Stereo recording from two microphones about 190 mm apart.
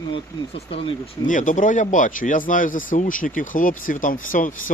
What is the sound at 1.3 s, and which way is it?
Speech, 45° left (ahead or behind).